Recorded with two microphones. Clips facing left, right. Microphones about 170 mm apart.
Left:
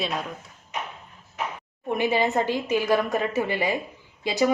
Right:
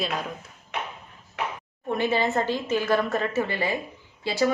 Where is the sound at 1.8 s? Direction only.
15° left (ahead or behind).